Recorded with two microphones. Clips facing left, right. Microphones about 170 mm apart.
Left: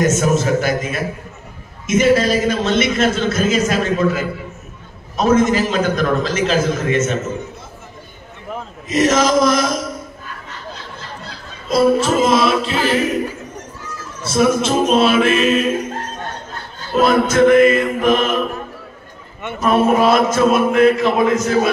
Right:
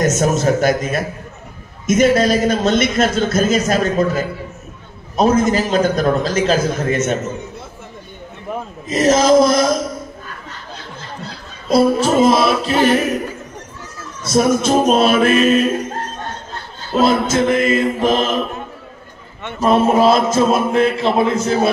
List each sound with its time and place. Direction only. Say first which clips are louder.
0.0 s a man's voice: even; 40° right (ahead or behind)
8.8 s a man's voice: right 2 dB; 35° right (ahead or behind)
11.7 s a man's voice: right 1 dB; 35° right (ahead or behind)
14.2 s a man's voice: right 1 dB; 40° right (ahead or behind)
17.0 s mantra: left 2 dB; 30° right (ahead or behind)
19.6 s mantra: right 1 dB; 30° right (ahead or behind)
20.3 s a man's voice: left 1 dB; 30° right (ahead or behind)